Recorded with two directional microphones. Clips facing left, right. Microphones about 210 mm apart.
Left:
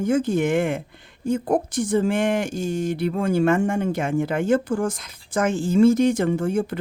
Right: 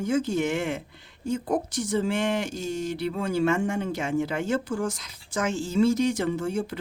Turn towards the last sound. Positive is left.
turn(degrees=55)  # may be behind; listen again after turning